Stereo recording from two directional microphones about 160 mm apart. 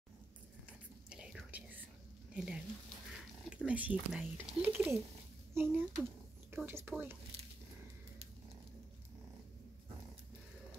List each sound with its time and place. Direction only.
1.1 s whispering: 5° right (ahead or behind)
2.3 s speech: 5° right (ahead or behind)